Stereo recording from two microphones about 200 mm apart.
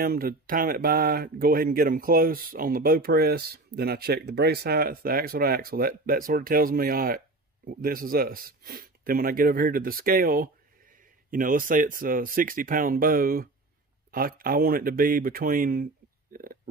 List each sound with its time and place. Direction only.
0.0 s speech: 45° right (ahead or behind)